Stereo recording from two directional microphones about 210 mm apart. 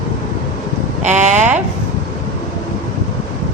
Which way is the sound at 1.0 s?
35° right (ahead or behind).